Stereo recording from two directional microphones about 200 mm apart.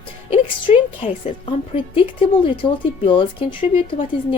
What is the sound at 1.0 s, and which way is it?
A woman's voice, 35° left (ahead or behind).